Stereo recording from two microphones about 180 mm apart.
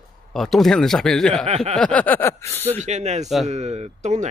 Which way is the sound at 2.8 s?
40° right (ahead or behind).